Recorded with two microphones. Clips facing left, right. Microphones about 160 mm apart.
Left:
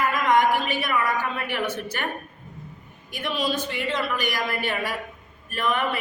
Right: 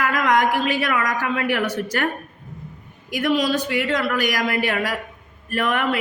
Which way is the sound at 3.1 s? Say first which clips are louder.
Right 7 dB; 85° right.